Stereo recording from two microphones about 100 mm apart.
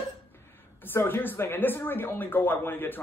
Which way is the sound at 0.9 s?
20° left (ahead or behind).